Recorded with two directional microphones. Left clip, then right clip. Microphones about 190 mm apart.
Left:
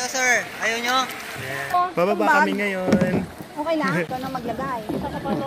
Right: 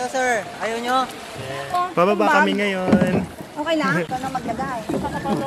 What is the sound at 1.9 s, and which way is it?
Speech, 10° right (ahead or behind).